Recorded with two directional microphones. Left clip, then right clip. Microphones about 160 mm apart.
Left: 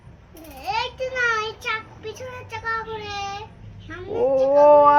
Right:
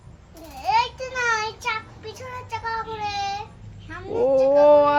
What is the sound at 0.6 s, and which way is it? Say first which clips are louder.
Child singing: right 4 dB; 20° right (ahead or behind).